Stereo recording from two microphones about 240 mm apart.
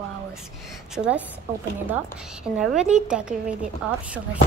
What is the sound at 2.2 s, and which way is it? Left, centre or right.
Speech, centre.